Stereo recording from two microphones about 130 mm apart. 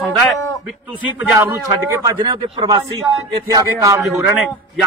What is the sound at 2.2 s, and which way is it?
Speech, 35° right (ahead or behind).